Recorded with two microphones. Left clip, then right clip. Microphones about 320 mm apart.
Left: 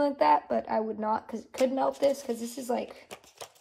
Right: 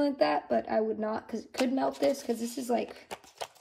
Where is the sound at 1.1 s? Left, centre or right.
Centre.